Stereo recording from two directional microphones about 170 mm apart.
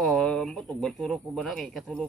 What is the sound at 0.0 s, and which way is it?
Speech, centre (ahead or behind).